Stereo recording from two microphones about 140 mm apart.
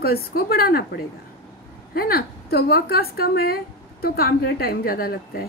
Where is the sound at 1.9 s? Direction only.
90° left.